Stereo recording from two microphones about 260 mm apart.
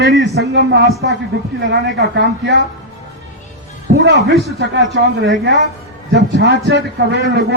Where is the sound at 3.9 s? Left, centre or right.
Right.